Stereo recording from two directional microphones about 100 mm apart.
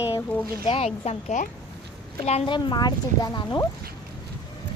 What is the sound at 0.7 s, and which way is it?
Speech, 85° left.